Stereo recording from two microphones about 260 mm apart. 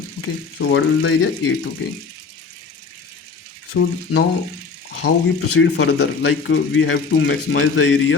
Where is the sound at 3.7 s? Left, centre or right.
Left.